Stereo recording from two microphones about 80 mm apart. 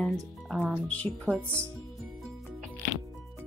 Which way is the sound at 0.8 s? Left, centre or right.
Centre.